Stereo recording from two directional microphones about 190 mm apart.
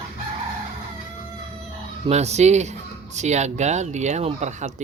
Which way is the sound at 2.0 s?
35° right (ahead or behind).